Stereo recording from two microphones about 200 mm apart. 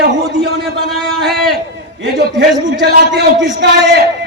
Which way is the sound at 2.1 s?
60° right (ahead or behind).